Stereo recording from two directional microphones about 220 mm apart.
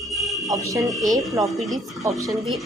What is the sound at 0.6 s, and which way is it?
Speech, 15° right (ahead or behind).